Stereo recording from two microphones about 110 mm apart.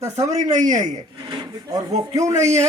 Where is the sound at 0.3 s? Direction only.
90° right.